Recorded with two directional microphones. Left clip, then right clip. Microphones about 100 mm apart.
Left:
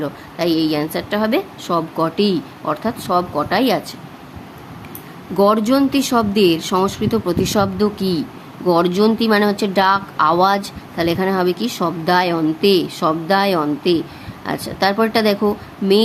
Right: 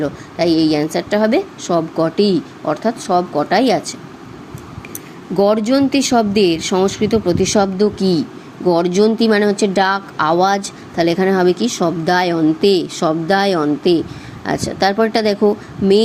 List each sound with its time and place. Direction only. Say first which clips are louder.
0.0 s a woman's voice: right 3 dB; 20° right (ahead or behind)
5.4 s a woman's voice: right 1 dB; 15° right (ahead or behind)